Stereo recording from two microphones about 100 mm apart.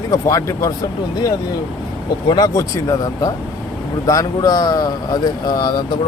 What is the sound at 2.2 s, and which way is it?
Speech, 45° left (ahead or behind).